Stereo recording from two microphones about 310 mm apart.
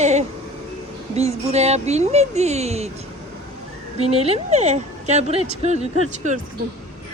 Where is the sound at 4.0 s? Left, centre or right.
Centre.